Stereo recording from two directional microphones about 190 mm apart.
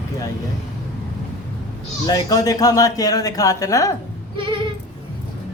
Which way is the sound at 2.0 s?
20° left (ahead or behind).